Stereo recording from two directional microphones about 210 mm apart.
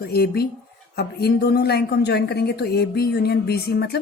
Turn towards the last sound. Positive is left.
turn(degrees=50)  # may be behind; listen again after turning